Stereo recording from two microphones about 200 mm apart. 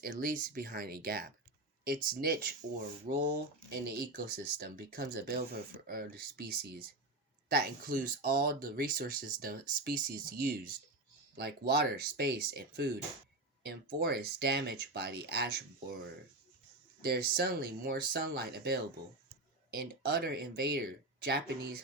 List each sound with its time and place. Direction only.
0.0 s speech: 45° right (ahead or behind)
17.0 s speech: 50° right (ahead or behind)